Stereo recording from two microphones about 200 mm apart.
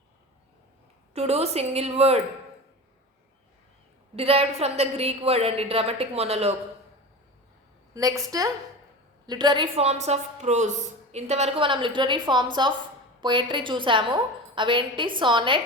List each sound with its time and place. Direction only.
1.1 s a woman's voice: 30° right (ahead or behind)
4.1 s a woman's voice: 30° right (ahead or behind)
7.9 s a woman's voice: 15° right (ahead or behind)